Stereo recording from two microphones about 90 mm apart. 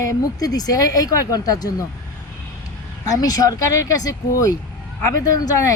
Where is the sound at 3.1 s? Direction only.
40° left (ahead or behind).